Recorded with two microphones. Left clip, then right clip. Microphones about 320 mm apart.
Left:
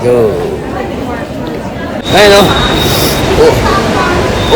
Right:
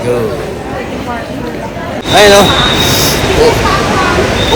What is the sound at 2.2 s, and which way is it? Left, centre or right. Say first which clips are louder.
Speech: even; centre.